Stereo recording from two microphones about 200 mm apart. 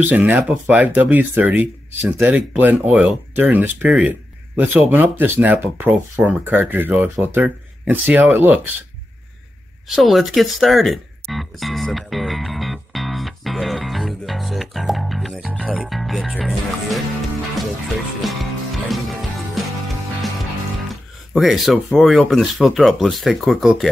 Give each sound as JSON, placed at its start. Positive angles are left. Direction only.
{"t": 0.0, "sound": "speech", "side_deg": -5}
{"t": 9.9, "sound": "music", "side_deg": 0}
{"t": 18.2, "sound": "music", "side_deg": 0}
{"t": 20.9, "sound": "speech", "side_deg": 0}